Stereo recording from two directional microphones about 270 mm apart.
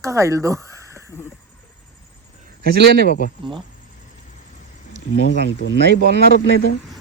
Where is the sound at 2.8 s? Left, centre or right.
Right.